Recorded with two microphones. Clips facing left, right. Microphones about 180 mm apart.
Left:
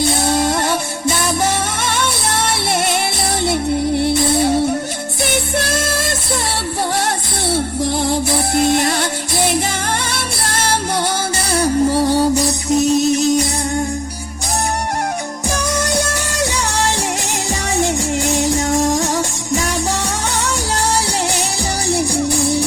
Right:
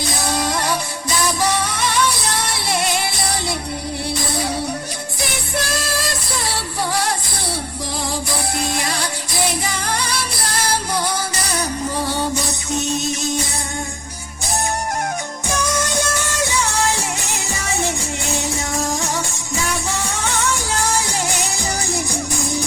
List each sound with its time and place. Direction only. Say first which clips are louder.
0.0 s music: left 6 dB; 25° left (ahead or behind)
3.5 s music: left 9 dB; 60° left (ahead or behind)
4.1 s music: left 8 dB; 25° left (ahead or behind)
8.7 s music: left 7 dB; 25° left (ahead or behind)
15.4 s music: left 2 dB; 35° left (ahead or behind)
19.5 s music: left 4 dB; 40° left (ahead or behind)